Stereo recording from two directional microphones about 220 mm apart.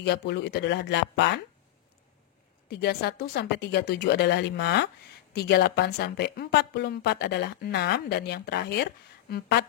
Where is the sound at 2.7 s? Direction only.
45° left (ahead or behind).